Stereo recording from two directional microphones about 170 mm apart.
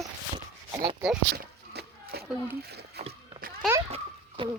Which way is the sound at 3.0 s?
35° right (ahead or behind).